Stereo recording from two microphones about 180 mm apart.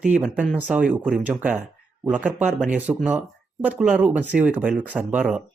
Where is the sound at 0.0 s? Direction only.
5° right (ahead or behind).